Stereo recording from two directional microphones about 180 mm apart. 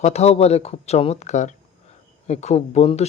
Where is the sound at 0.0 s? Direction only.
35° left (ahead or behind).